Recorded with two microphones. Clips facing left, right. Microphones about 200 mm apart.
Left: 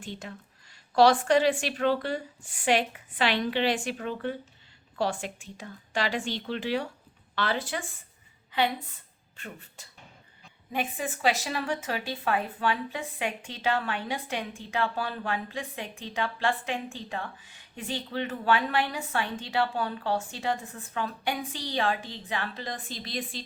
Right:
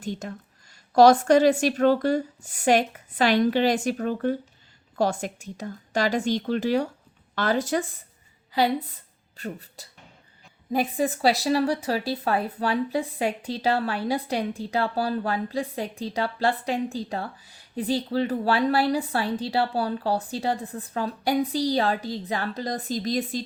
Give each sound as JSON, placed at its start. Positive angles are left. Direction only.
{"t": 0.0, "sound": "a woman's voice", "side_deg": -45}